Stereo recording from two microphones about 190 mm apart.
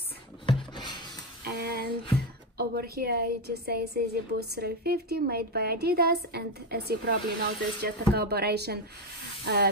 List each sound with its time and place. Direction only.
0.5 s a sound: 25° left (ahead or behind)
1.4 s a woman's voice: 60° right (ahead or behind)
9.4 s spray: 60° right (ahead or behind)